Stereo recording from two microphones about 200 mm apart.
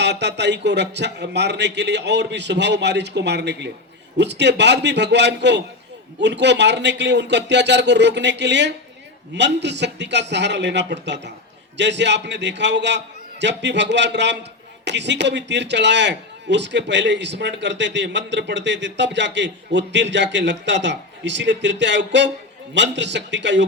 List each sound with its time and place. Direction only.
0.0 s a man's voice: 60° right (ahead or behind)